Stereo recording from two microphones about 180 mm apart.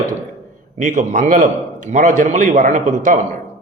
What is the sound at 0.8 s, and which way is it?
A man's voice, 45° right (ahead or behind).